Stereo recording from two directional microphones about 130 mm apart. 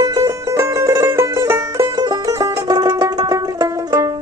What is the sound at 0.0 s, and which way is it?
Music, 30° right (ahead or behind).